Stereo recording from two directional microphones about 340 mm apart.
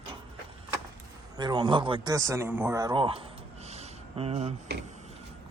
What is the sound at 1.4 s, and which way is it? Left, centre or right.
Speech, centre.